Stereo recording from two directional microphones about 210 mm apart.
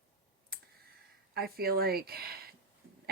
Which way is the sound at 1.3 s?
45° right (ahead or behind).